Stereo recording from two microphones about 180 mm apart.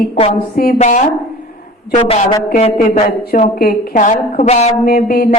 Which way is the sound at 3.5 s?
55° left (ahead or behind).